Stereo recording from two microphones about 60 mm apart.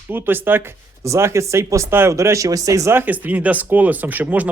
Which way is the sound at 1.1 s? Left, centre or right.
Right.